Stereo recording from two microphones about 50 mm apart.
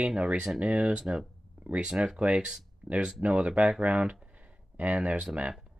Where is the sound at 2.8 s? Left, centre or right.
Right.